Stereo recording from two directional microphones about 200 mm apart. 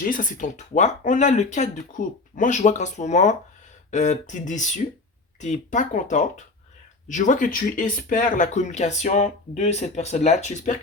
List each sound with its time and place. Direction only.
0.0 s speech: 45° left (ahead or behind)